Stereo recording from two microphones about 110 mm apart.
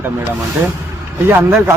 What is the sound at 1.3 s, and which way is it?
Speech, 20° right (ahead or behind).